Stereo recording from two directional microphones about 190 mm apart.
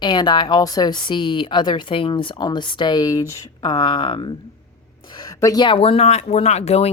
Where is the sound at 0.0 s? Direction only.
25° left (ahead or behind).